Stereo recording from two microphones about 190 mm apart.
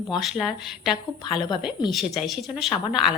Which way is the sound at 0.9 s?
25° left (ahead or behind).